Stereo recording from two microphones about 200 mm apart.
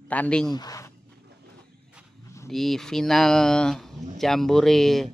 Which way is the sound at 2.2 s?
15° left (ahead or behind).